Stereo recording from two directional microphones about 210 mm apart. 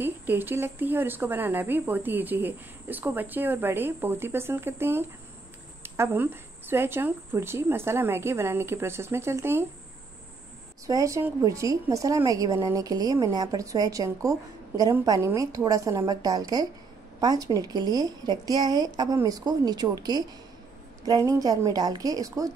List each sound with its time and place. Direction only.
0.0 s speech: 10° right (ahead or behind)
10.9 s speech: 15° right (ahead or behind)